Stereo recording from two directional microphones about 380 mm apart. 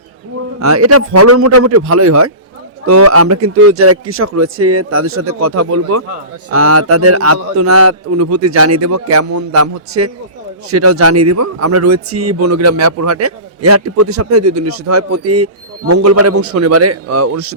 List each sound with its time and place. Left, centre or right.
0.6 s a man's voice: right